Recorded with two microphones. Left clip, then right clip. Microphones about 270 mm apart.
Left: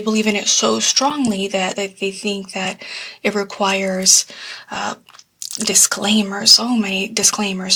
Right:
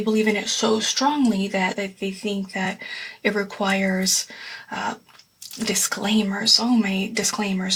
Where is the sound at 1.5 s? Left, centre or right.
Left.